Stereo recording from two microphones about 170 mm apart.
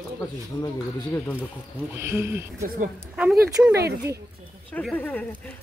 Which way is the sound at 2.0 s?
15° right (ahead or behind).